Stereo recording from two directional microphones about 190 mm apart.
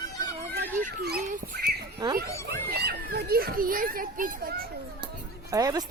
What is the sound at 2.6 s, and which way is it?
A child's voice, 55° right (ahead or behind).